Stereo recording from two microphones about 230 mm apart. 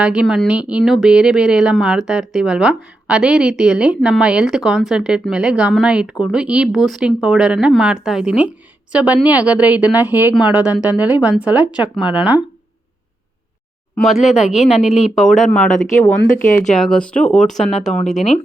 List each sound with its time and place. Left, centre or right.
0.0 s speech: centre
13.9 s speech: centre
14.4 s speech: left
15.1 s speech: centre
16.7 s speech: centre